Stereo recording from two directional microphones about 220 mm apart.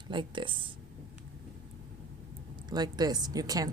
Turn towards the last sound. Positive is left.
turn(degrees=-15)  # may be behind; listen again after turning